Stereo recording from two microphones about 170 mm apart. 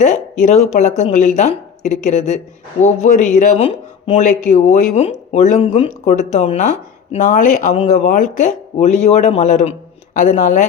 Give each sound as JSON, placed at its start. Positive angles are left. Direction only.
{"t": 0.4, "sound": "speech", "side_deg": 45}